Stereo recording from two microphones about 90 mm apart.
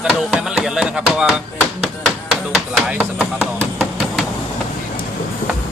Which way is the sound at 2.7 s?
15° right (ahead or behind).